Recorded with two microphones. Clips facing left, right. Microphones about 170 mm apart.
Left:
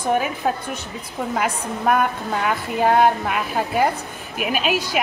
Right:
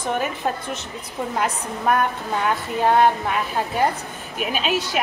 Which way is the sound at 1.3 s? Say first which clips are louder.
Left 2 dB; centre (ahead or behind).